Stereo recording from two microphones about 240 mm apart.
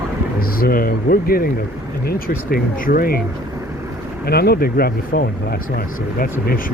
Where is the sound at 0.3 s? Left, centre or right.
Left.